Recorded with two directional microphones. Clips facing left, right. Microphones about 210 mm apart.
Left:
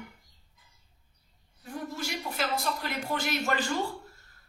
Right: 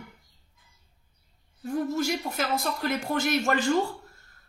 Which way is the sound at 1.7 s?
45° right (ahead or behind).